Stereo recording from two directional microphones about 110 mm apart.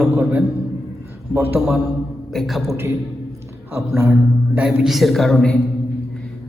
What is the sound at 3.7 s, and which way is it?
Speech, 20° right (ahead or behind).